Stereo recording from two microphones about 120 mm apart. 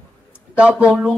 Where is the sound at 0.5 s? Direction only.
10° right (ahead or behind).